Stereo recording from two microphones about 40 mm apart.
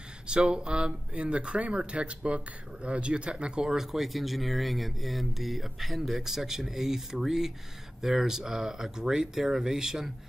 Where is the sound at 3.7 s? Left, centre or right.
Centre.